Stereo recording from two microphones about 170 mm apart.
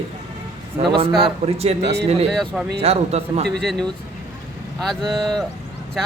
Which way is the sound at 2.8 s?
40° right (ahead or behind).